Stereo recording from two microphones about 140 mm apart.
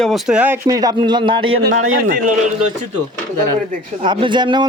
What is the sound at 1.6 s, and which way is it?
Speech, 90° right.